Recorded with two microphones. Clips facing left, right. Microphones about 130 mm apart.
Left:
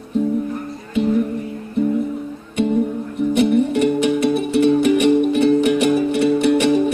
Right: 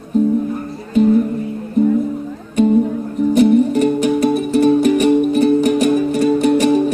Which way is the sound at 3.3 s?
40° right (ahead or behind).